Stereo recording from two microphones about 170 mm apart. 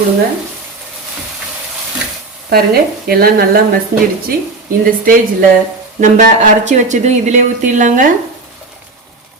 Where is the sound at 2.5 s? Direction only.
65° right (ahead or behind).